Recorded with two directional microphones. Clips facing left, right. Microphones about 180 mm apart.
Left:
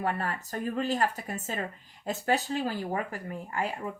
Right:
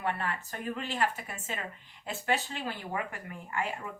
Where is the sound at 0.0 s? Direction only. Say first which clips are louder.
Left 2 dB; 40° left (ahead or behind).